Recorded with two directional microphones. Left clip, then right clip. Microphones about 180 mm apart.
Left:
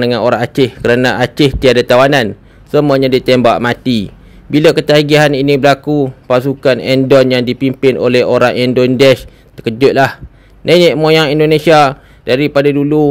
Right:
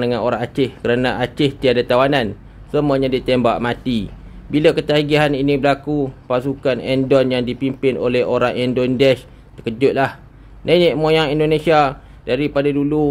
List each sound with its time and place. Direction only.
0.0 s speech: 40° left (ahead or behind)